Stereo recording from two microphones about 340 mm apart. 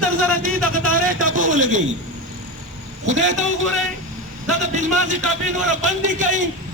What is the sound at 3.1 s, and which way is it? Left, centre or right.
Speech, right.